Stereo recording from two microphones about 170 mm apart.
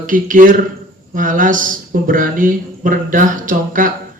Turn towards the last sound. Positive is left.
turn(degrees=-50)  # may be behind; listen again after turning